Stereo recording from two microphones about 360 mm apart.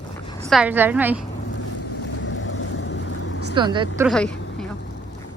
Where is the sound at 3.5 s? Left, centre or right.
Centre.